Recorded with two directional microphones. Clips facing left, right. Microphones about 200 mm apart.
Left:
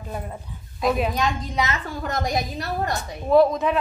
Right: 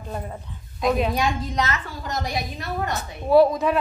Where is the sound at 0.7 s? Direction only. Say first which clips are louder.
Right 1 dB; centre (ahead or behind).